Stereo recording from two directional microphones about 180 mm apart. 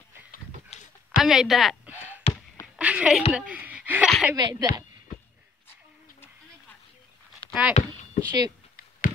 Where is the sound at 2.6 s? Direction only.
5° right (ahead or behind).